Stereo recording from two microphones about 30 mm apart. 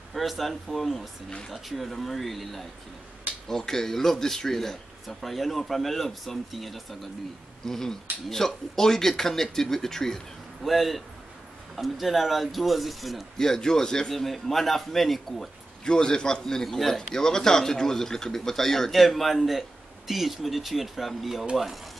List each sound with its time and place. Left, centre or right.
0.1 s speech: centre
3.4 s speech: centre
5.0 s speech: centre
7.6 s speech: centre
10.6 s speech: centre
13.4 s speech: left
14.1 s speech: centre
15.8 s speech: left
16.6 s speech: centre
18.9 s speech: centre